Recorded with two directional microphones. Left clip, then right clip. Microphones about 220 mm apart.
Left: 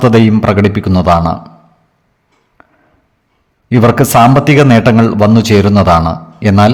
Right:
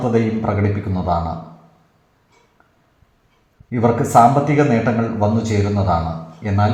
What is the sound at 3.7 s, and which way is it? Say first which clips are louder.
A man's voice: left 7 dB; 40° left (ahead or behind).